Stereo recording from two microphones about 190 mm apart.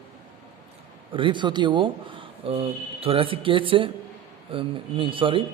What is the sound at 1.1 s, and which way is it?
A man's voice, 25° right (ahead or behind).